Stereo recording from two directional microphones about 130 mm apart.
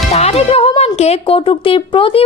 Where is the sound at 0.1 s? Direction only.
50° left (ahead or behind).